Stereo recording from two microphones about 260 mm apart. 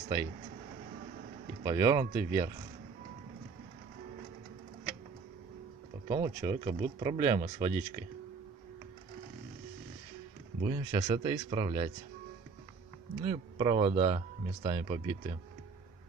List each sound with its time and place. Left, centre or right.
1.6 s speech: centre
6.0 s speech: centre
10.6 s speech: centre
13.2 s speech: centre